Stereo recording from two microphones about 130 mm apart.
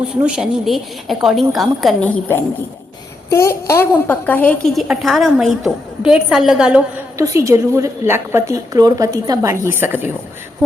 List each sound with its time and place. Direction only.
0.2 s a woman's voice: 5° right (ahead or behind)
2.0 s a woman's voice: 10° left (ahead or behind)
3.2 s a woman's voice: 20° left (ahead or behind); by 6.8 s 5° right (ahead or behind)
7.2 s a woman's voice: 25° right (ahead or behind)